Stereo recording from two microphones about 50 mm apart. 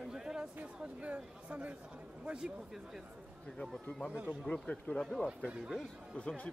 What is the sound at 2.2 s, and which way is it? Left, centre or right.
Speech, centre.